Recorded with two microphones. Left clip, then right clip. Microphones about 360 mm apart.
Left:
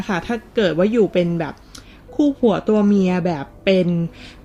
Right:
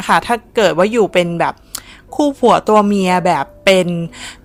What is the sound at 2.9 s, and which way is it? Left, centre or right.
Speech, centre.